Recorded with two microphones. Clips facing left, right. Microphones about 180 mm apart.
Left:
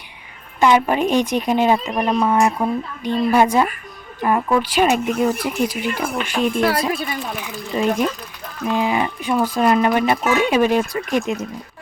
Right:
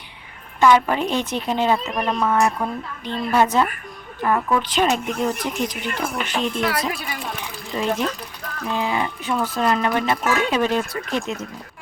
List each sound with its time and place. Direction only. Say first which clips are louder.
0.6 s speech: left 1 dB; 15° left (ahead or behind)
6.6 s speech: left 6 dB; 30° left (ahead or behind)
7.8 s speech: left 4 dB; 10° left (ahead or behind)